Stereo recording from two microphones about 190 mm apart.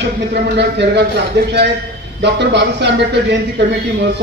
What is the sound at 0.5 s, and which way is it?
Speech, 60° right (ahead or behind).